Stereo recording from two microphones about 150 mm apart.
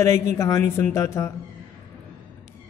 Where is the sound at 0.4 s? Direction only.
20° left (ahead or behind).